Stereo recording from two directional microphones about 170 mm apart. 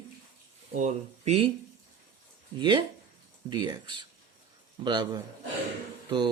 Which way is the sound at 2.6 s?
30° right (ahead or behind).